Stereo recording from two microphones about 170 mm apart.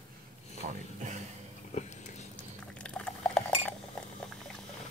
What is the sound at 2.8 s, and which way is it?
Glass, 5° left (ahead or behind).